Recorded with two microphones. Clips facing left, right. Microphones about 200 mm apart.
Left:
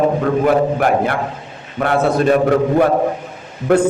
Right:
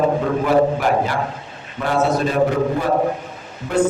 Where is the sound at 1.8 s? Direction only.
65° left (ahead or behind).